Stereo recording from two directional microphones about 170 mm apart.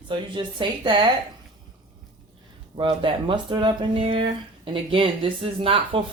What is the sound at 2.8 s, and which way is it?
Speech, 30° right (ahead or behind).